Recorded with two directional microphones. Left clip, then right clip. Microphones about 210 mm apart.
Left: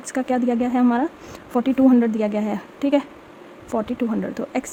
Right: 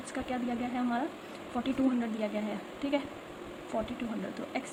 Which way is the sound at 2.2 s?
50° left (ahead or behind).